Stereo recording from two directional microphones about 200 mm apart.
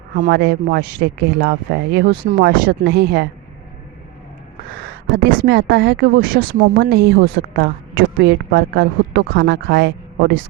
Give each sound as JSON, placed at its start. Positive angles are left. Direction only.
{"t": 0.2, "sound": "speech", "side_deg": -55}
{"t": 5.1, "sound": "speech", "side_deg": -60}